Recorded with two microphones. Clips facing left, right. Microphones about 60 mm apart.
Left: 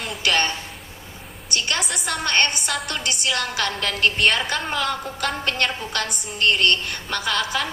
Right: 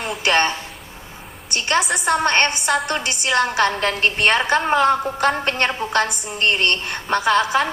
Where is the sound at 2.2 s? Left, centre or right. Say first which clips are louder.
Right 4 dB; right.